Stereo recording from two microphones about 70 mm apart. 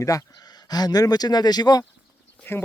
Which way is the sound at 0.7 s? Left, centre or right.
Left.